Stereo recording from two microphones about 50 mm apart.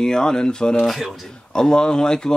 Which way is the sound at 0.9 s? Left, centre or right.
Centre.